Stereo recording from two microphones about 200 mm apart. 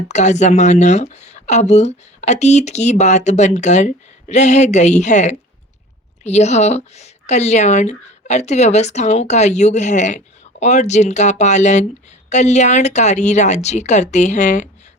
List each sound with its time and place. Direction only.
0.1 s speech: 35° left (ahead or behind)